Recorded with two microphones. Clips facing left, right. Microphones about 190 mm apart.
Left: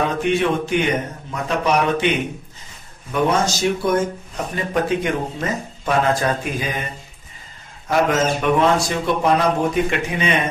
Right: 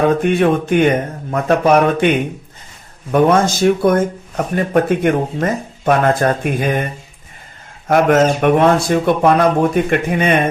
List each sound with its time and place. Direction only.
0.2 s speech: 50° right (ahead or behind)
3.1 s speech: 55° right (ahead or behind)
7.9 s speech: 55° right (ahead or behind)